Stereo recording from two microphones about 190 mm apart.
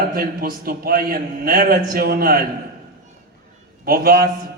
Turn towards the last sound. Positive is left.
turn(degrees=-50)  # may be behind; listen again after turning